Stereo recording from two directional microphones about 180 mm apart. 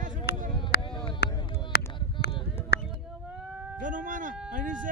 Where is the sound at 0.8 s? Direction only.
30° left (ahead or behind).